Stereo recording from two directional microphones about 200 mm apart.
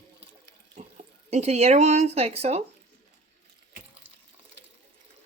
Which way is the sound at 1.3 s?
35° right (ahead or behind).